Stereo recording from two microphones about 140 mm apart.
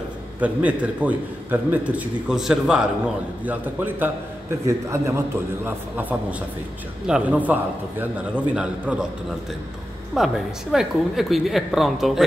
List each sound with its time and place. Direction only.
0.4 s a man's voice: 10° right (ahead or behind)
8.5 s a man's voice: 5° right (ahead or behind)
10.1 s a woman's voice: centre (ahead or behind)